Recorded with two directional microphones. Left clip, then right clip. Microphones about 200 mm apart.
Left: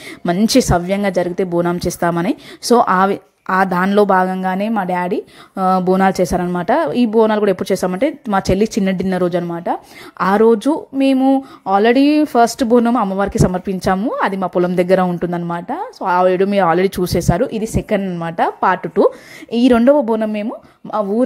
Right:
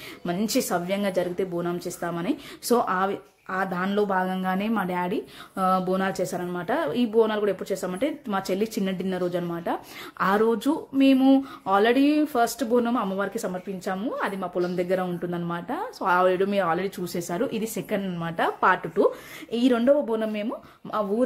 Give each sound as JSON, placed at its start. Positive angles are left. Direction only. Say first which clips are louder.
{"t": 0.2, "sound": "a woman's voice", "louder": "left 12 dB", "side_deg": 35}